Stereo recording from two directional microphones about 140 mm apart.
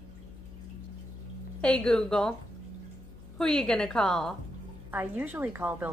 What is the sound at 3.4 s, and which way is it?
Speech, 5° left (ahead or behind).